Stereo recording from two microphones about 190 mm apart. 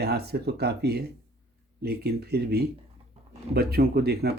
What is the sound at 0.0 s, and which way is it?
Speech, 60° right (ahead or behind).